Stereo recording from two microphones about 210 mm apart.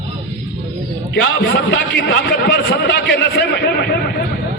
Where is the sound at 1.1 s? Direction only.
55° left (ahead or behind).